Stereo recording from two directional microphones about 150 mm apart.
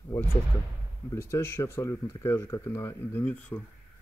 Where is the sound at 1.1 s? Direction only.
15° left (ahead or behind).